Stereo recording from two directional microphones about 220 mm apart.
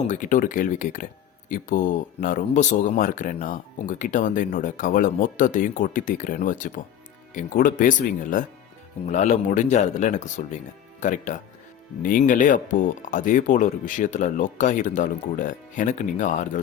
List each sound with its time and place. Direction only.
0.1 s speech: 35° left (ahead or behind)